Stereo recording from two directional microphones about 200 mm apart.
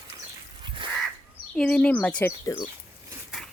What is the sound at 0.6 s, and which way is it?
Crow, 25° right (ahead or behind).